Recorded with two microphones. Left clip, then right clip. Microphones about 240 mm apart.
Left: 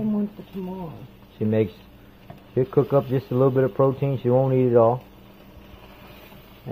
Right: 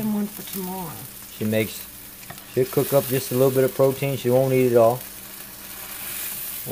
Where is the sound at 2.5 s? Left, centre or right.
Centre.